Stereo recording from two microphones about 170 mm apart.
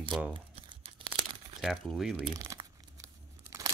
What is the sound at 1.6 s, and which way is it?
Speech, centre (ahead or behind).